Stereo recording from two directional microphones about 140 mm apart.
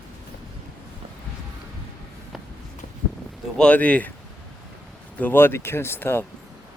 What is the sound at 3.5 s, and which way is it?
Speech, 10° left (ahead or behind).